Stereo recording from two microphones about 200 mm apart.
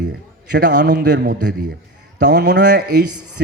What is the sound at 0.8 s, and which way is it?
A man's voice, 60° right (ahead or behind).